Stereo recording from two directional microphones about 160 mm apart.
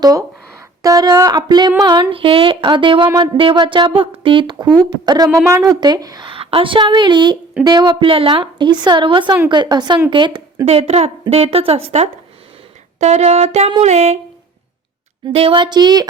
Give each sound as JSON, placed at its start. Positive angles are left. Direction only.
{"t": 0.0, "sound": "a woman's voice", "side_deg": -20}
{"t": 13.9, "sound": "a sound", "side_deg": -45}
{"t": 15.3, "sound": "a woman's voice", "side_deg": -35}